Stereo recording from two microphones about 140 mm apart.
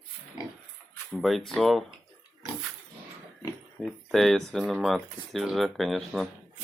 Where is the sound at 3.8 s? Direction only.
Centre (ahead or behind).